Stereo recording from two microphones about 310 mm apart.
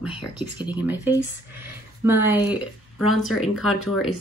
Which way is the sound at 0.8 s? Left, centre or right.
Centre.